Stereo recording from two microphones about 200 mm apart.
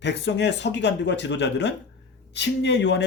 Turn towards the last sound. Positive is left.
turn(degrees=60)  # may be behind; listen again after turning